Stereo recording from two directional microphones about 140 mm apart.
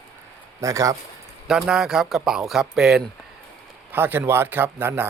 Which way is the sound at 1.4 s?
5° right (ahead or behind).